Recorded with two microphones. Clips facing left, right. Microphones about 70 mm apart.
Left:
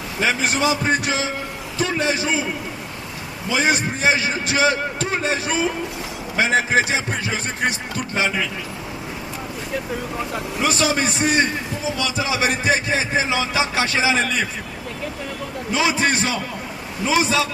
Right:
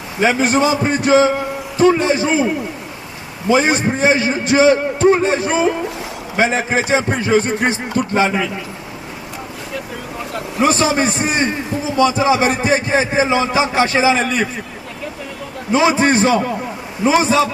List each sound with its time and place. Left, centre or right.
0.2 s a man's voice: right
3.5 s a man's voice: right
10.6 s a man's voice: right
15.7 s a man's voice: right